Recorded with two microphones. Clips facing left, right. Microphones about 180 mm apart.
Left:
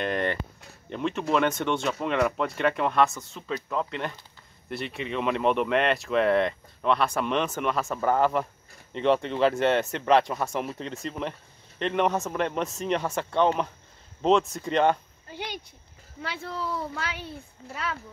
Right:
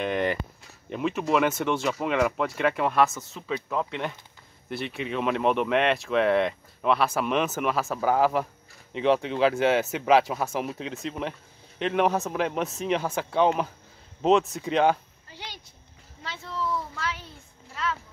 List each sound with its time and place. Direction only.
0.0 s speech: 5° right (ahead or behind)
16.9 s speech: 65° left (ahead or behind)